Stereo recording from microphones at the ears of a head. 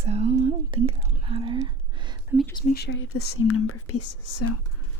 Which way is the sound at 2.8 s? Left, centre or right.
Left.